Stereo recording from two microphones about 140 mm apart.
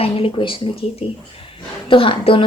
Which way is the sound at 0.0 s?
40° left (ahead or behind).